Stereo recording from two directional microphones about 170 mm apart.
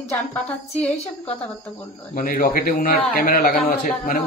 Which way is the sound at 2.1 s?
55° left (ahead or behind).